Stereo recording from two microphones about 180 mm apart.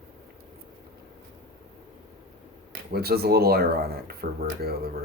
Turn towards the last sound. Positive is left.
turn(degrees=-60)  # may be behind; listen again after turning